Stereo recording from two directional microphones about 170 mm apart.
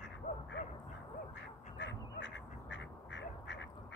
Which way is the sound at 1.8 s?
90° left.